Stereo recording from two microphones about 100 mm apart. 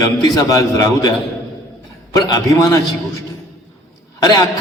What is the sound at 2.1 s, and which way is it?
Speech, 40° left (ahead or behind).